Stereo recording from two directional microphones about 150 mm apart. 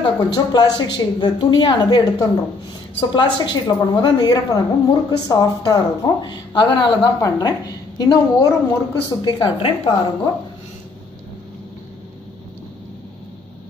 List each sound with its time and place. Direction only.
0.0 s a woman's voice: 30° left (ahead or behind)